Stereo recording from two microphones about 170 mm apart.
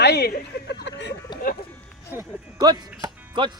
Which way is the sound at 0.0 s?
70° left (ahead or behind).